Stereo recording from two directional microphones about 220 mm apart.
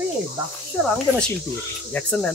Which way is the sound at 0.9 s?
5° left (ahead or behind).